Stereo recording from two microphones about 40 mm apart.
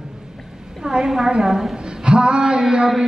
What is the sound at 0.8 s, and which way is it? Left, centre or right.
Mantra, centre.